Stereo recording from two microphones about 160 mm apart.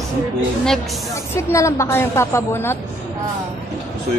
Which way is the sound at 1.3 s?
15° left (ahead or behind).